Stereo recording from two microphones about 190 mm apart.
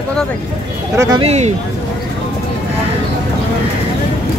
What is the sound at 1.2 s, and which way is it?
Speech, 35° right (ahead or behind).